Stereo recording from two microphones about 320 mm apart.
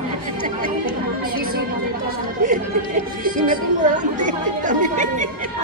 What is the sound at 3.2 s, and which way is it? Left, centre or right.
Chatter, right.